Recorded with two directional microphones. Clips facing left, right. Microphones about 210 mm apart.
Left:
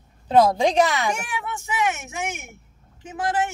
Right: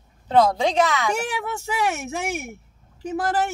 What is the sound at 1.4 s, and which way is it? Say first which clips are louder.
Speech: right 1 dB; 35° right (ahead or behind).